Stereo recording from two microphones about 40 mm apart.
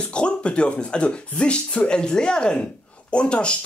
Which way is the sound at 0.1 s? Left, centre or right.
Left.